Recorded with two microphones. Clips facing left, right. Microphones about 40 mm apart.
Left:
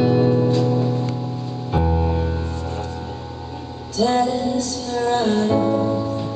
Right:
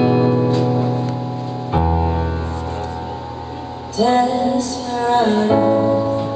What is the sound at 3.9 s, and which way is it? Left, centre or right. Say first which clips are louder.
Music: right 3 dB; right.